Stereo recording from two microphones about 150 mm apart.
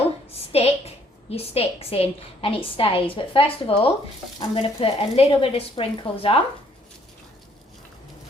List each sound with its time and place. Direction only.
0.3 s a woman's voice: 40° left (ahead or behind)